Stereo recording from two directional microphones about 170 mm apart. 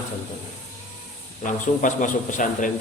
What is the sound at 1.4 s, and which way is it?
A man's voice, 50° left (ahead or behind).